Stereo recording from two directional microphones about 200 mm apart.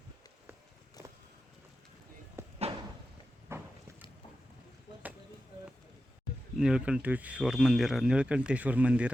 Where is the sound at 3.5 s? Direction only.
10° right (ahead or behind).